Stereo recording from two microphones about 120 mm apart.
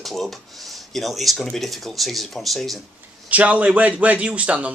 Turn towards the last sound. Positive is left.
turn(degrees=-10)  # may be behind; listen again after turning